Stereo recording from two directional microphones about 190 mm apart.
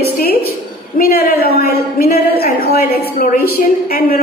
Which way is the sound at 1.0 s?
50° left (ahead or behind).